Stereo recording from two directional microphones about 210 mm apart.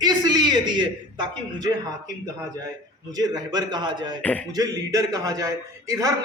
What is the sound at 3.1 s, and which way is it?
Speech, 20° right (ahead or behind).